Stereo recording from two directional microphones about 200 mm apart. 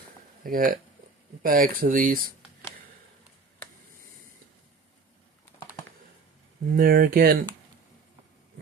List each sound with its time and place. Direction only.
0.4 s speech: 45° right (ahead or behind)
6.7 s speech: 45° right (ahead or behind)